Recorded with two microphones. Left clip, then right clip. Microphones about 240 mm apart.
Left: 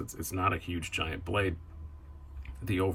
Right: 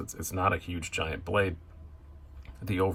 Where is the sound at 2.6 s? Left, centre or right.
Centre.